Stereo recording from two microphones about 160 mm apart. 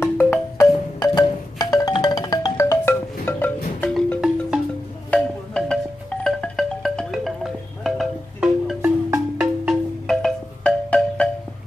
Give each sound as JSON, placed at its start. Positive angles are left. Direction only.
{"t": 0.0, "sound": "music", "side_deg": 15}